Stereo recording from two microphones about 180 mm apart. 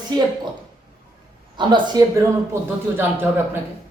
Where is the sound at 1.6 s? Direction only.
25° right (ahead or behind).